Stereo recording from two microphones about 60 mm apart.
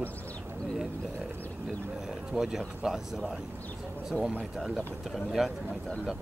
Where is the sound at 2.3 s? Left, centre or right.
Centre.